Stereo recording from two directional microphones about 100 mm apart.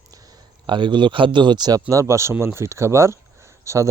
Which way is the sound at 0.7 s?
50° right (ahead or behind).